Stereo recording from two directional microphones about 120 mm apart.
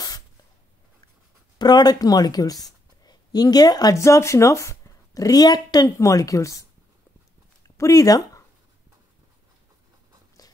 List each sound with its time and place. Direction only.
1.6 s speech: 35° left (ahead or behind)
7.7 s speech: 25° left (ahead or behind)